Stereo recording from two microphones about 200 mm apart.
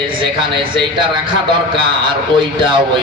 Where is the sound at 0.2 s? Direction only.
25° right (ahead or behind).